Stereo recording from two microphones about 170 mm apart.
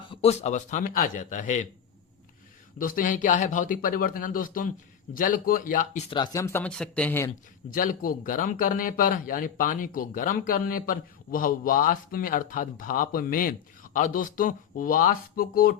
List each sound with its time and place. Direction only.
0.1 s speech: 35° left (ahead or behind)
2.7 s speech: 55° left (ahead or behind)
6.1 s speech: 25° left (ahead or behind); by 7.3 s 10° left (ahead or behind)
7.7 s speech: 55° left (ahead or behind)